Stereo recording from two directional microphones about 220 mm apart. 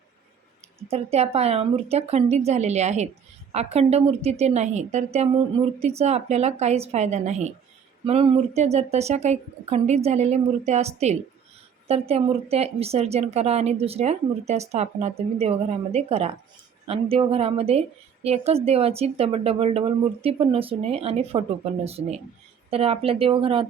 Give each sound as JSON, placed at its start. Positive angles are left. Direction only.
{"t": 0.8, "sound": "a woman's voice", "side_deg": -25}